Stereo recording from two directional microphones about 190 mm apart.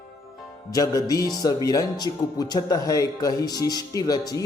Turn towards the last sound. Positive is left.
turn(degrees=20)  # may be behind; listen again after turning